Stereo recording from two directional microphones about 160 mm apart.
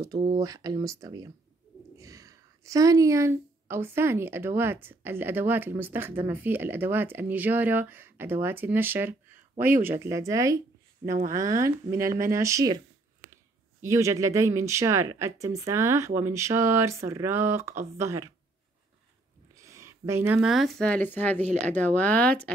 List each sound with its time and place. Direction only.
0.3 s a woman's voice: 25° right (ahead or behind)
19.5 s a sound: 20° right (ahead or behind)
20.3 s speech: centre (ahead or behind)